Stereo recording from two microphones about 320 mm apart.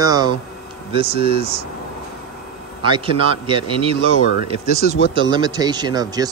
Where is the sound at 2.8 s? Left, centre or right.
Centre.